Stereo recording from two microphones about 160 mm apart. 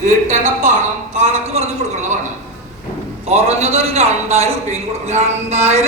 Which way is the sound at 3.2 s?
40° right (ahead or behind).